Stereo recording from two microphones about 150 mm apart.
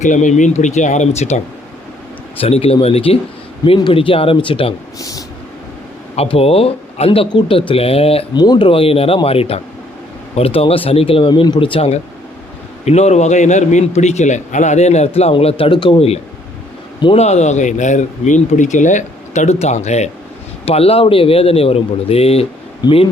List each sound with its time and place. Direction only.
0.0 s a man's voice: 55° left (ahead or behind)
2.4 s speech: 40° left (ahead or behind)
4.9 s speech: 20° left (ahead or behind)
6.1 s speech: 40° left (ahead or behind)
8.4 s a man's voice: 30° left (ahead or behind)